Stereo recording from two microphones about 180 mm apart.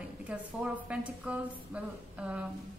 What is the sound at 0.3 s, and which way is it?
A woman's voice, 5° right (ahead or behind).